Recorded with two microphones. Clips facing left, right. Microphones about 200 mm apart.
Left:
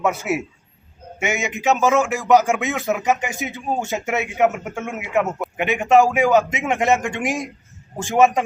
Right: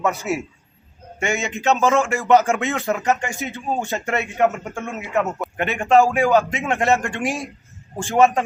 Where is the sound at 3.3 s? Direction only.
15° left (ahead or behind).